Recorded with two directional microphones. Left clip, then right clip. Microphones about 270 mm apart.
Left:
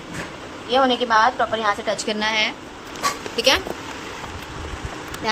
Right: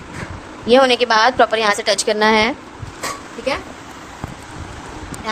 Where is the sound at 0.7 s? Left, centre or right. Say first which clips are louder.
Right 5 dB; right; by 2.5 s centre.